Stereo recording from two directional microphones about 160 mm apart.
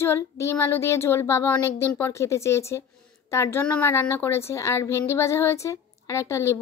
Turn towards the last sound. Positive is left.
turn(degrees=15)  # may be behind; listen again after turning